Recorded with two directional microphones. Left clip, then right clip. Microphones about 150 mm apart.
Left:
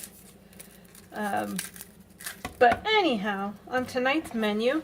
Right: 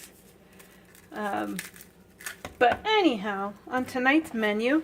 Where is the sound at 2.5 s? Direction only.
40° right (ahead or behind).